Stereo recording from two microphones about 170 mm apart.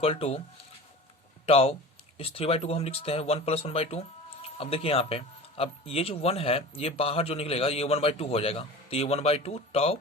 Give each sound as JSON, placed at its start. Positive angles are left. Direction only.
{"t": 0.0, "sound": "speech", "side_deg": 35}
{"t": 1.5, "sound": "speech", "side_deg": 35}